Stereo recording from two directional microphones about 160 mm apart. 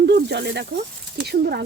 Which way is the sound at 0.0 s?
90° right.